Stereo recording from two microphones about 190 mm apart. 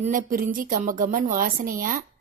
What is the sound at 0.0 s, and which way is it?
Speech, 45° right (ahead or behind).